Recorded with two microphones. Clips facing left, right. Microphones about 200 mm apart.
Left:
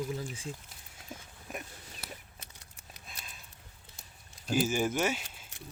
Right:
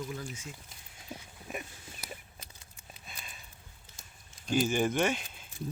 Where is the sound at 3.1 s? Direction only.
Centre (ahead or behind).